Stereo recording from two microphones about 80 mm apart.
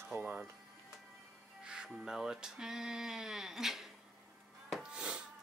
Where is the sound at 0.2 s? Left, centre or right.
Centre.